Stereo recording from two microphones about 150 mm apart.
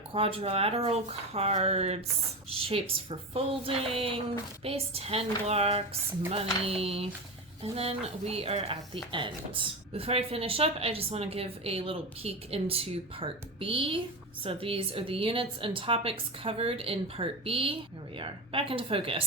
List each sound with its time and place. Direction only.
0.1 s speech: 40° right (ahead or behind)